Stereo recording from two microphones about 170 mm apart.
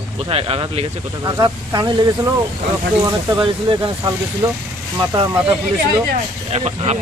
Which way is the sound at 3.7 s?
30° right (ahead or behind).